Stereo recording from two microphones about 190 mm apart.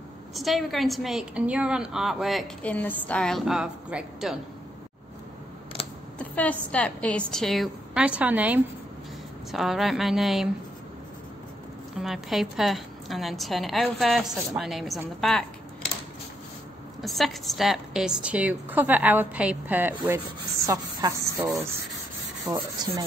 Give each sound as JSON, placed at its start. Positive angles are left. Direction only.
{"t": 0.3, "sound": "a woman's voice", "side_deg": 0}
{"t": 6.1, "sound": "a woman's voice", "side_deg": 5}
{"t": 12.0, "sound": "a woman's voice", "side_deg": 0}
{"t": 17.0, "sound": "a woman's voice", "side_deg": 0}
{"t": 20.6, "sound": "rub", "side_deg": -20}
{"t": 22.5, "sound": "rub", "side_deg": -20}